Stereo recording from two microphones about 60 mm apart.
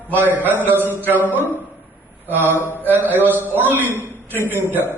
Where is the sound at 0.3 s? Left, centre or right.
Right.